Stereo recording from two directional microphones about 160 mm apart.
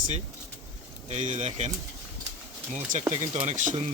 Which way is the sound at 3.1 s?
35° right (ahead or behind).